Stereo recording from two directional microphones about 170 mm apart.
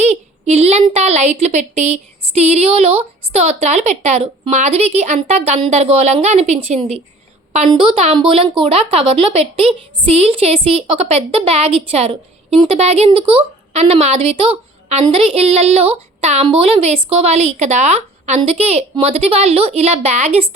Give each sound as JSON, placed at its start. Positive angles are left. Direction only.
{"t": 0.0, "sound": "a woman's voice", "side_deg": -40}